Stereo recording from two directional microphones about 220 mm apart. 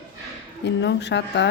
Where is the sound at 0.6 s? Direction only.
50° left (ahead or behind).